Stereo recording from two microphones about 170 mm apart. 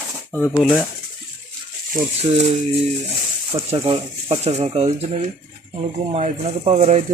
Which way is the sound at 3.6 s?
35° right (ahead or behind).